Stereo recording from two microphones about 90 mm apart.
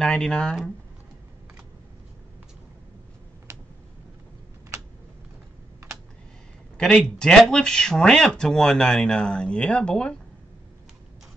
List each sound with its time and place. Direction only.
0.0 s speech: 10° left (ahead or behind)
3.5 s computer keyboard: 30° right (ahead or behind)
6.8 s speech: 10° left (ahead or behind)